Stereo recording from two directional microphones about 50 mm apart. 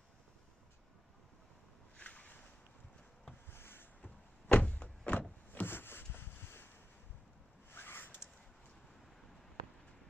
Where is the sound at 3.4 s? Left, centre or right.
Left.